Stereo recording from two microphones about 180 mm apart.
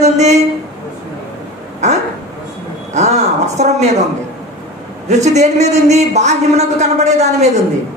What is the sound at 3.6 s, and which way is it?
Speech, 40° right (ahead or behind).